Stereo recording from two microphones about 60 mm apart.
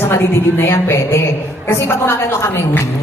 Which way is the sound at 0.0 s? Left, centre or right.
Left.